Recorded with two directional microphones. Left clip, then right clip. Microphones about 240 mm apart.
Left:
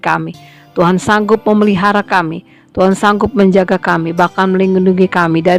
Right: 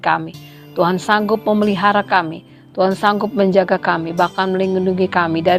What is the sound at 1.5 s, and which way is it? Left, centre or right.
A woman's voice, left.